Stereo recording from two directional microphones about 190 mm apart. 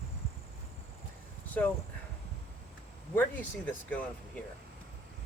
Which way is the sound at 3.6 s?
10° left (ahead or behind).